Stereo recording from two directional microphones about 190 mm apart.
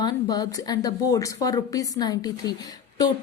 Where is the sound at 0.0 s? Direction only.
20° left (ahead or behind).